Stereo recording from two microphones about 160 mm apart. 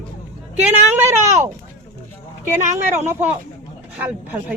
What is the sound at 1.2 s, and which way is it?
Speech, 45° right (ahead or behind).